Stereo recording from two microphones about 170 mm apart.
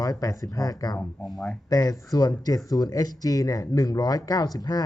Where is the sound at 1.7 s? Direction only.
20° left (ahead or behind).